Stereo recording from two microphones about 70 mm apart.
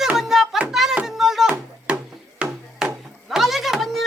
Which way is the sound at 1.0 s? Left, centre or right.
Centre.